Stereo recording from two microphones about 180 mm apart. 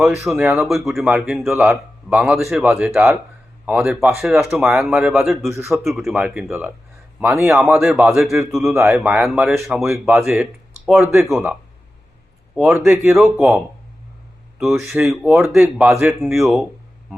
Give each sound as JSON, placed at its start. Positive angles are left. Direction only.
{"t": 0.3, "sound": "speech", "side_deg": -5}
{"t": 8.7, "sound": "speech", "side_deg": -15}
{"t": 12.5, "sound": "speech", "side_deg": -5}
{"t": 12.9, "sound": "speech", "side_deg": -15}
{"t": 13.1, "sound": "speech", "side_deg": 0}
{"t": 14.6, "sound": "speech", "side_deg": 0}
{"t": 15.6, "sound": "speech", "side_deg": -15}